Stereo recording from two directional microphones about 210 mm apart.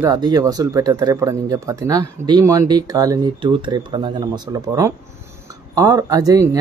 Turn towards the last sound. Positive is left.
turn(degrees=-15)  # may be behind; listen again after turning